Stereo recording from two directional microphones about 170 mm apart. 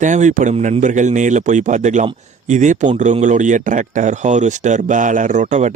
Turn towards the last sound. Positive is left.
turn(degrees=-45)  # may be behind; listen again after turning